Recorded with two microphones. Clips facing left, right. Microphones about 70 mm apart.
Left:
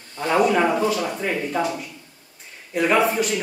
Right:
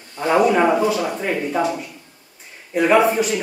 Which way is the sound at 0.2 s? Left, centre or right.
Centre.